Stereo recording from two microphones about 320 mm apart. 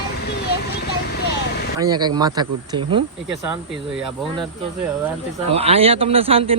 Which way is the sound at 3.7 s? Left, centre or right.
Centre.